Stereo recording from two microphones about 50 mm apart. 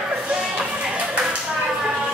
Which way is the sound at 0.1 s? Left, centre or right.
Centre.